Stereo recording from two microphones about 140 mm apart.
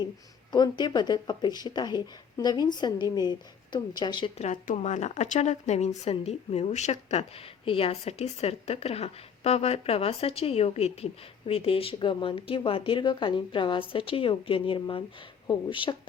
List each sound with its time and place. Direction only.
0.5 s a woman's voice: 30° left (ahead or behind)
4.4 s a woman's voice: 60° left (ahead or behind); by 16.0 s 35° left (ahead or behind)